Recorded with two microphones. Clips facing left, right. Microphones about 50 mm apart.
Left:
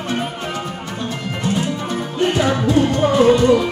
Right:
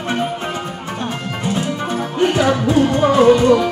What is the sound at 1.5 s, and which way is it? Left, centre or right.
Music, right.